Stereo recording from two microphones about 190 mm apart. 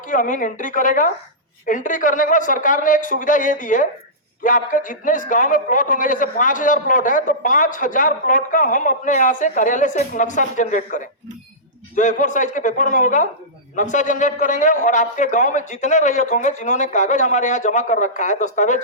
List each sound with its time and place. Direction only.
0.1 s a man's voice: 45° left (ahead or behind)